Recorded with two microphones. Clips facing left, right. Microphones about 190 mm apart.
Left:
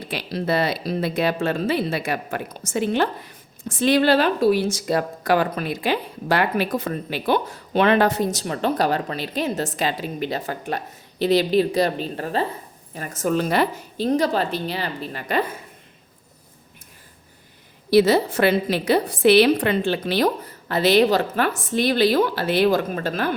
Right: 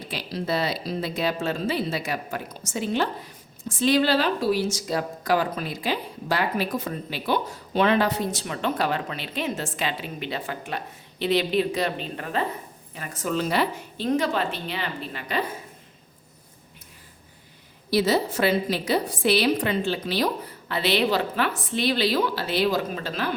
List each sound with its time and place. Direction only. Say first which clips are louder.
0.1 s a woman's voice: left 4 dB; 60° left (ahead or behind); by 15.4 s 45° left (ahead or behind)
17.9 s a woman's voice: left 6 dB; 60° left (ahead or behind)